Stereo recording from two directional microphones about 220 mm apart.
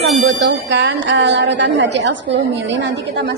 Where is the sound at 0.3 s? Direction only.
55° right (ahead or behind).